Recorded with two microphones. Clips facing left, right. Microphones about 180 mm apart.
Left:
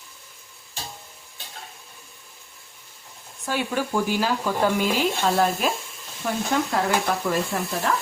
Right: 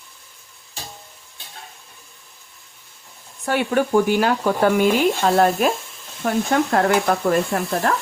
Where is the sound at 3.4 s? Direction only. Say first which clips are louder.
Right 6 dB; 60° right (ahead or behind).